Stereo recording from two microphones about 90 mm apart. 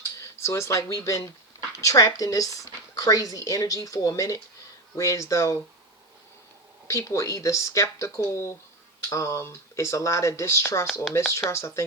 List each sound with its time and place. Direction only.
0.2 s speech: 30° left (ahead or behind)
6.8 s speech: 35° left (ahead or behind)